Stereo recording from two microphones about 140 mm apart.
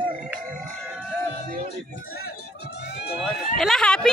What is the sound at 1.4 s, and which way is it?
Music, 90° right.